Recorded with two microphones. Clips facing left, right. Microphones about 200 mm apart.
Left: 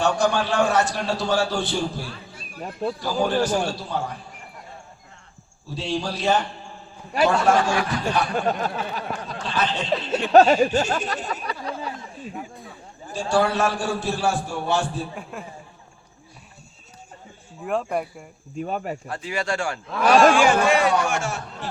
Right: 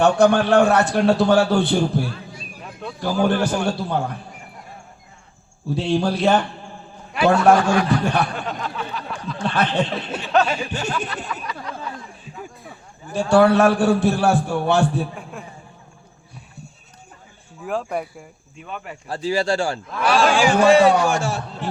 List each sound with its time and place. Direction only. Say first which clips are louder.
0.0 s a man's voice: right 6 dB; 60° right (ahead or behind)
5.6 s a man's voice: right 7 dB; 55° right (ahead or behind)
7.4 s a man's voice: right 5 dB; 60° right (ahead or behind)
8.4 s a sound: left 3 dB; 45° left (ahead or behind)
9.4 s a man's voice: right 6 dB; 60° right (ahead or behind)
10.3 s speech: left 6 dB; 40° left (ahead or behind)
13.1 s a man's voice: right 7 dB; 60° right (ahead or behind)
15.3 s speech: even; centre (ahead or behind)
17.6 s speech: even; centre (ahead or behind)
18.5 s speech: left 7 dB; 40° left (ahead or behind)
19.0 s speech: right 6 dB; 30° right (ahead or behind)